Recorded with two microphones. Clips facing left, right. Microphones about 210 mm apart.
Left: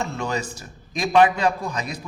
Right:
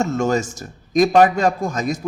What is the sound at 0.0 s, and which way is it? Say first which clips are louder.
A man's voice: right 8 dB; 45° right (ahead or behind).